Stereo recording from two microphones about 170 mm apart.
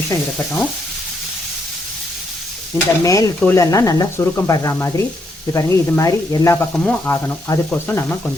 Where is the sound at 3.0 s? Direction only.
20° left (ahead or behind).